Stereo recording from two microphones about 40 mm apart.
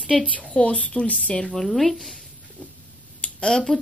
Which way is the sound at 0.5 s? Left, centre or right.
Left.